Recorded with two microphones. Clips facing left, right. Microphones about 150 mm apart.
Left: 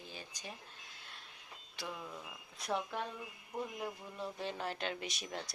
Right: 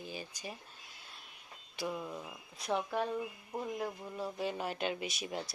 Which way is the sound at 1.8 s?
20° right (ahead or behind).